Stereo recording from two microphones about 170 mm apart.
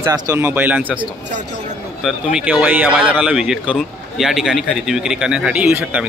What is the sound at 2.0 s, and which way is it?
Speech, 5° right (ahead or behind).